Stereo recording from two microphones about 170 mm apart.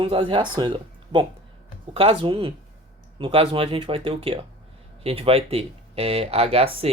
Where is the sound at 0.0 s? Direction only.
30° right (ahead or behind).